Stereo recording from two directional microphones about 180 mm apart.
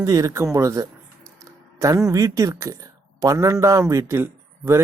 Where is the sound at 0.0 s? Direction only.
20° right (ahead or behind).